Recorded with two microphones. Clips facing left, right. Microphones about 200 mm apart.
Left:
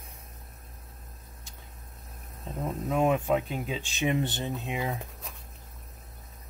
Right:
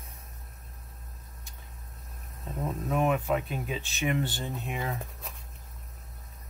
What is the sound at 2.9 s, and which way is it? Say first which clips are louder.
Speech: left 2 dB; 20° left (ahead or behind).